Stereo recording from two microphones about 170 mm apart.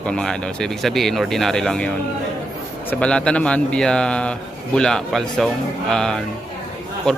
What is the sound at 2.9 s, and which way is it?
Speech, 5° left (ahead or behind).